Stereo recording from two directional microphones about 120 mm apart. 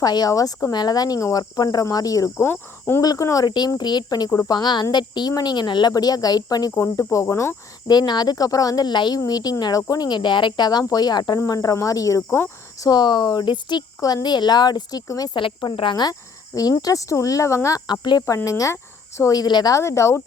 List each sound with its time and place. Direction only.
0.0 s speech: 35° left (ahead or behind)
2.5 s cricket: 20° left (ahead or behind)
3.0 s speech: 30° left (ahead or behind)
7.9 s speech: 35° left (ahead or behind)
12.9 s speech: 40° left (ahead or behind)
15.4 s speech: 45° left (ahead or behind); by 20.2 s 25° left (ahead or behind)